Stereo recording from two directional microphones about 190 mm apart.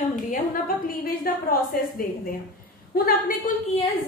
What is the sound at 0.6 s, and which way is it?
A woman's voice, 50° left (ahead or behind).